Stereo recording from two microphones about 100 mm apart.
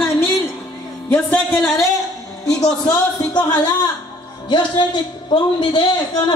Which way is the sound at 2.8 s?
45° left (ahead or behind).